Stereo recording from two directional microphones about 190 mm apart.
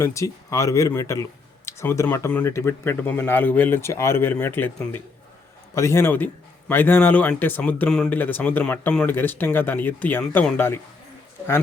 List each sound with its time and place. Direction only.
0.0 s a man's voice: 15° left (ahead or behind)